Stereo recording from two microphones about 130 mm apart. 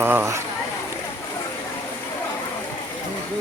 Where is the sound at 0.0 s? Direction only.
15° right (ahead or behind).